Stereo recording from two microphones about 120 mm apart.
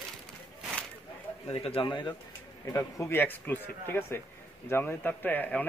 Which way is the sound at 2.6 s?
25° left (ahead or behind).